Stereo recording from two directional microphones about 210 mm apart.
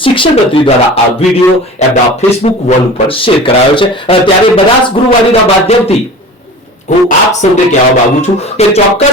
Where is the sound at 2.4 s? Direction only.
30° left (ahead or behind).